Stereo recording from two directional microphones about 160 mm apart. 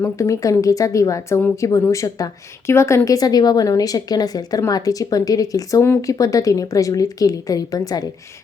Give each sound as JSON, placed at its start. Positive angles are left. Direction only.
{"t": 0.0, "sound": "a woman's voice", "side_deg": 20}